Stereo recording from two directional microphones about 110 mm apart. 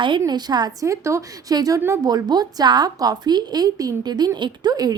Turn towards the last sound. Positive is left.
turn(degrees=-35)  # may be behind; listen again after turning